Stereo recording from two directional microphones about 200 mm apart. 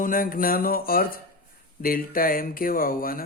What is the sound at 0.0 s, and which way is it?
A man's voice, 45° left (ahead or behind).